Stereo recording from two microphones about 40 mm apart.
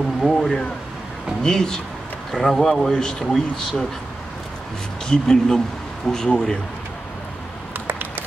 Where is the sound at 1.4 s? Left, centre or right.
Centre.